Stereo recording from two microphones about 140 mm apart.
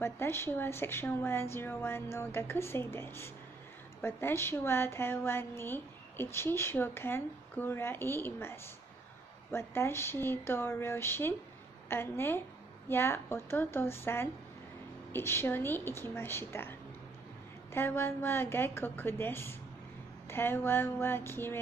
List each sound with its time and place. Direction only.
0.0 s a woman's voice: 15° left (ahead or behind)
17.7 s a woman's voice: 15° left (ahead or behind)